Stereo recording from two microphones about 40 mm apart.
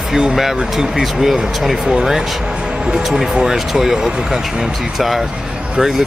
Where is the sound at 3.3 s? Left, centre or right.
Centre.